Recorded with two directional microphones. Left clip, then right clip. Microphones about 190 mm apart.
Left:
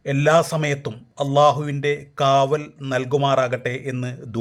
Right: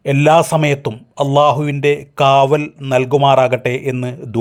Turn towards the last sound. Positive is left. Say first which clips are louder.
# right 8 dB
turn(degrees=-25)  # may be behind; listen again after turning